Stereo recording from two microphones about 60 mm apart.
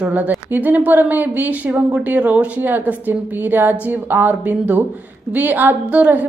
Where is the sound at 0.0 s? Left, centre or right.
Right.